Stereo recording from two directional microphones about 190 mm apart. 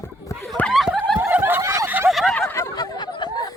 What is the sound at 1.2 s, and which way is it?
Snicker, 10° right (ahead or behind).